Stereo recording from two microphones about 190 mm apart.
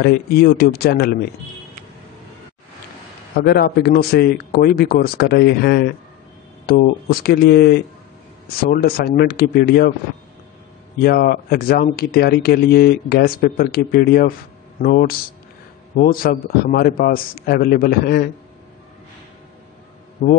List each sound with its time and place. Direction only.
0.0 s a man's voice: 55° left (ahead or behind)
3.3 s a man's voice: 55° left (ahead or behind)
11.0 s speech: 50° left (ahead or behind)
20.2 s speech: 50° left (ahead or behind)